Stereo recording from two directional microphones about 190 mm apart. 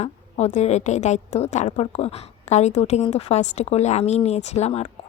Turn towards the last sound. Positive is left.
turn(degrees=35)  # may be behind; listen again after turning